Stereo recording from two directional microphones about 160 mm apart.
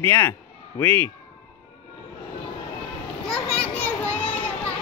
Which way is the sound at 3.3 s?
5° left (ahead or behind).